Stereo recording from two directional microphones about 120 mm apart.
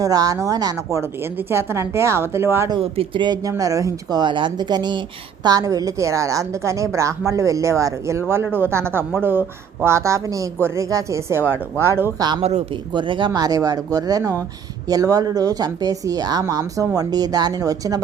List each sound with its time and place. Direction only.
0.0 s a woman's voice: 30° right (ahead or behind)
2.8 s speech: 50° right (ahead or behind)
3.6 s a woman's voice: 25° right (ahead or behind)
4.2 s a woman's voice: 40° right (ahead or behind); by 12.1 s 20° right (ahead or behind)
12.4 s speech: 65° right (ahead or behind)
12.9 s speech: 40° right (ahead or behind)